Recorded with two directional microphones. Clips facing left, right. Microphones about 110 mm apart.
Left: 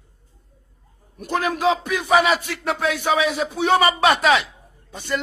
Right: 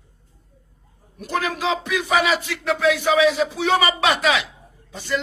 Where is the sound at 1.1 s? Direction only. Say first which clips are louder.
Left 2 dB; 50° left (ahead or behind).